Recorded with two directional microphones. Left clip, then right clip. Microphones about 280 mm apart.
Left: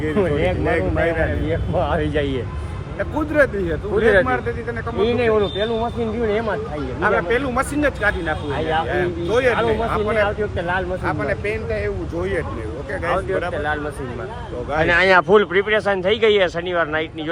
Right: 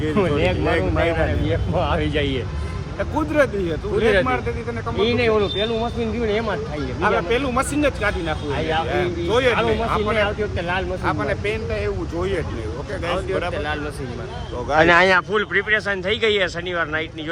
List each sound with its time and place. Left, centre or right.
0.0 s speech: centre
14.7 s speech: right
15.3 s speech: centre